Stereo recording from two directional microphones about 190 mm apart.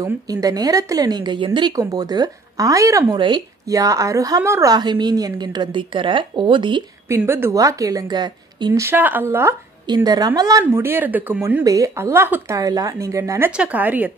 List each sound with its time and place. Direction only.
0.0 s a woman's voice: 20° right (ahead or behind)
7.1 s a woman's voice: 10° right (ahead or behind)